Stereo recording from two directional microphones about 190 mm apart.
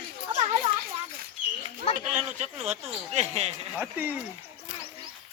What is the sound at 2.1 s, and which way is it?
Speech, 35° right (ahead or behind).